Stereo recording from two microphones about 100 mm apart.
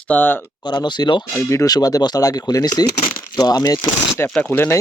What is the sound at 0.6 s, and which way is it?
Speech, 45° left (ahead or behind).